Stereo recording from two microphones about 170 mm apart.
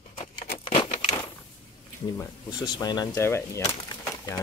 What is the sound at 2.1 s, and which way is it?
Cutlery, 20° left (ahead or behind).